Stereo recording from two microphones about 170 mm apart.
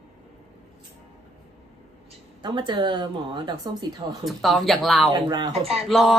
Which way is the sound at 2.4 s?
25° right (ahead or behind).